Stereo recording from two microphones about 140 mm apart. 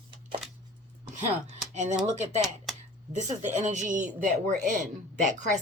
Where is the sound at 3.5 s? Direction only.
60° right (ahead or behind).